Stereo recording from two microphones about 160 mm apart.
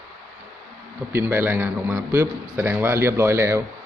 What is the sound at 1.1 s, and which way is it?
A man's voice, 15° right (ahead or behind).